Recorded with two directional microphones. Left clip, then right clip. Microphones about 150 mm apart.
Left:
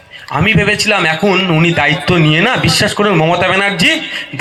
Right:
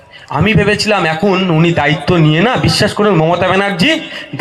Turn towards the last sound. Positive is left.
turn(degrees=-40)  # may be behind; listen again after turning